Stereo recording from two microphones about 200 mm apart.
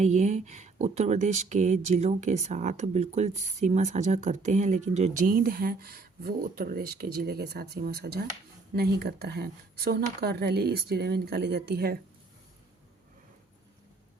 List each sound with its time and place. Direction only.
0.0 s speech: 35° right (ahead or behind); by 8.2 s 55° right (ahead or behind)
8.3 s a sound: 50° right (ahead or behind)
9.0 s speech: 55° right (ahead or behind)